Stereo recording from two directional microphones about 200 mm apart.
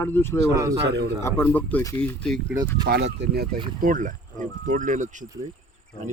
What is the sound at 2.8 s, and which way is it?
Speech, 55° right (ahead or behind).